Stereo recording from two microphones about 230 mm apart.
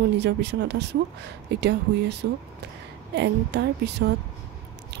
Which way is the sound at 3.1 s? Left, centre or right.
Right.